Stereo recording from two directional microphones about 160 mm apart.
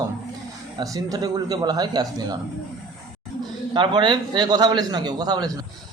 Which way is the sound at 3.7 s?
30° right (ahead or behind).